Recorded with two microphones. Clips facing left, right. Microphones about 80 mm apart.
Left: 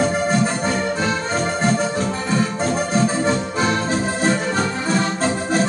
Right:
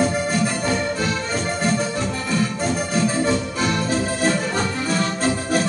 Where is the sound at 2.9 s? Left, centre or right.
Left.